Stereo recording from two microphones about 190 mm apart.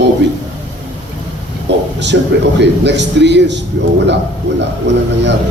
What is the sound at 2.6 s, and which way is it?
A man's voice, 65° right (ahead or behind).